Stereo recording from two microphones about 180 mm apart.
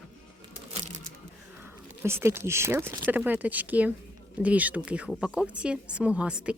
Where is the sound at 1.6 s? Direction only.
15° right (ahead or behind).